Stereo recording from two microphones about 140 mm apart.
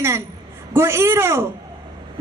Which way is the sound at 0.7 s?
15° right (ahead or behind).